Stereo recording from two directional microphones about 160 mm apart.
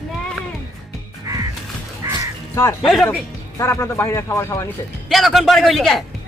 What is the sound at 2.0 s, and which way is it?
Crow, 20° right (ahead or behind).